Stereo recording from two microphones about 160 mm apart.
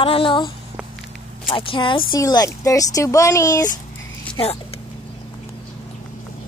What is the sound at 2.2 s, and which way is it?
Speech, 20° left (ahead or behind).